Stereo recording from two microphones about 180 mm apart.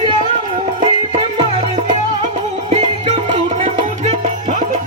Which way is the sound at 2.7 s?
35° right (ahead or behind).